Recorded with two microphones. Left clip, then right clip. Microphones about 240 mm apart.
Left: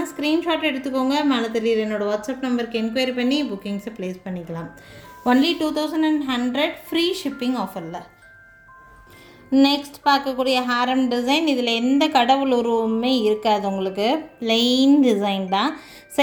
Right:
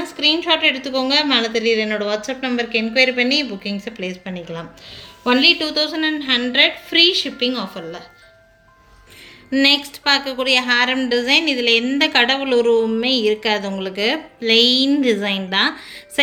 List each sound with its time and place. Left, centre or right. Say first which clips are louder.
0.2 s a woman's voice: right 6 dB; left
9.5 s a woman's voice: right 3 dB; left